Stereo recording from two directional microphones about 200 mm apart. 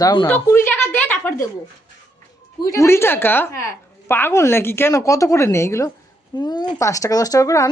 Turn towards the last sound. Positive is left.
turn(degrees=15)  # may be behind; listen again after turning